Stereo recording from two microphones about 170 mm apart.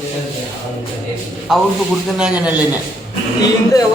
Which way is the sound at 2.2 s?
5° right (ahead or behind).